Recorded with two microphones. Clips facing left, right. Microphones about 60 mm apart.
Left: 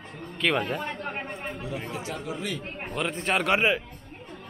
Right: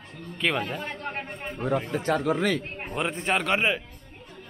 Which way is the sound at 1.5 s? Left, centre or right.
Right.